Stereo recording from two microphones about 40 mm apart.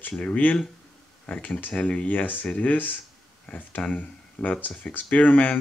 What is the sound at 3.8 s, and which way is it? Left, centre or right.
Speech, left.